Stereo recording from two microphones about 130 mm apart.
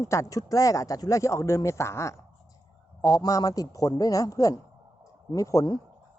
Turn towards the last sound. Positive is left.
turn(degrees=30)  # may be behind; listen again after turning